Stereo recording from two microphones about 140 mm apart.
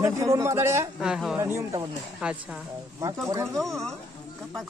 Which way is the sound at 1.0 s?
5° right (ahead or behind).